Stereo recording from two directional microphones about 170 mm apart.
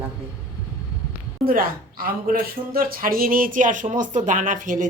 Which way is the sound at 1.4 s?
55° right (ahead or behind).